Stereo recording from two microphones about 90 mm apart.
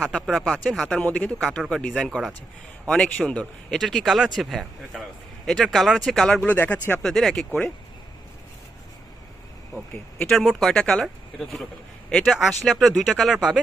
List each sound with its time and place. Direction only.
0.0 s speech: centre (ahead or behind)
6.5 s speech: 20° left (ahead or behind)
7.0 s speech: 5° left (ahead or behind)
9.7 s speech: 10° left (ahead or behind)